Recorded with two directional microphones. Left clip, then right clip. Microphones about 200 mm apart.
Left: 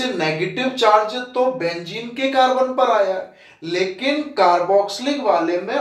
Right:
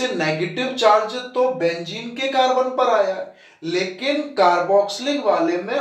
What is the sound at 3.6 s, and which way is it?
Speech, 25° left (ahead or behind).